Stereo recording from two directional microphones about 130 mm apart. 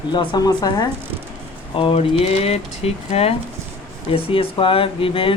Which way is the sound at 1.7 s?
45° left (ahead or behind).